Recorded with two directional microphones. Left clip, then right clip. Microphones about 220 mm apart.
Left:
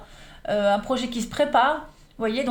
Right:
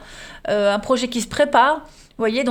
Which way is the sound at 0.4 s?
50° right (ahead or behind).